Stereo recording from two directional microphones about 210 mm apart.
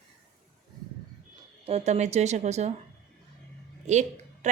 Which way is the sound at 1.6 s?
30° right (ahead or behind).